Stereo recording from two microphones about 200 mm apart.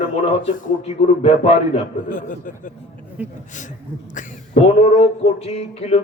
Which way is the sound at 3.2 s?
5° right (ahead or behind).